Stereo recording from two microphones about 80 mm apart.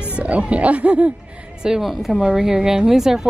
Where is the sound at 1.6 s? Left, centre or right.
Centre.